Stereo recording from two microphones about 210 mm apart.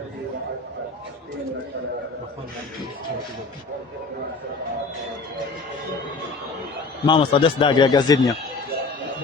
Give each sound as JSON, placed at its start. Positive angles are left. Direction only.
{"t": 7.0, "sound": "a man's voice", "side_deg": 20}